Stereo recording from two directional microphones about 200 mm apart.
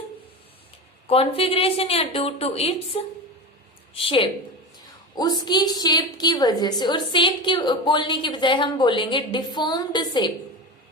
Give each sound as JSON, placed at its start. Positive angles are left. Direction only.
{"t": 1.0, "sound": "a woman's voice", "side_deg": 30}